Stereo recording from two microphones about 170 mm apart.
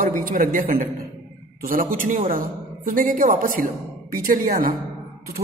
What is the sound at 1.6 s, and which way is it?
A man's voice, 55° right (ahead or behind).